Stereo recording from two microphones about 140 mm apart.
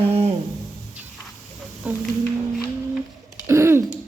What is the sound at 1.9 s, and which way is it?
Speech, 10° right (ahead or behind).